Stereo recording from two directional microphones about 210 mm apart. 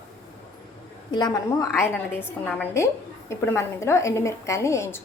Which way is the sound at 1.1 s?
20° left (ahead or behind).